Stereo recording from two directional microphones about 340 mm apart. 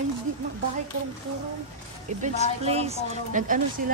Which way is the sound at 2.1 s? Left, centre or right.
Right.